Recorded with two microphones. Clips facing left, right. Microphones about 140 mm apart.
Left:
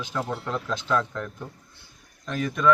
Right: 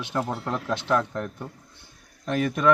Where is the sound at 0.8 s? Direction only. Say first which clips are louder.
Right 2 dB; 20° right (ahead or behind).